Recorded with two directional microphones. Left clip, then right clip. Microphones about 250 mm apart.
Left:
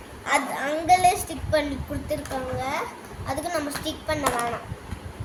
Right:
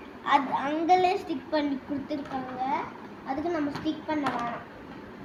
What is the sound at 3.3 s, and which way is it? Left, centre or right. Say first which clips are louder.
Speech: left 2 dB; centre.